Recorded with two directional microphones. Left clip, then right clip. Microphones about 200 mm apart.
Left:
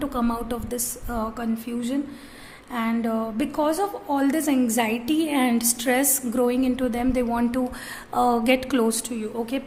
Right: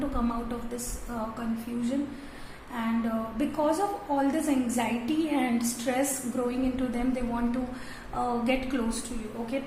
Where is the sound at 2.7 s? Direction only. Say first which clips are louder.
Left 5 dB; 55° left (ahead or behind).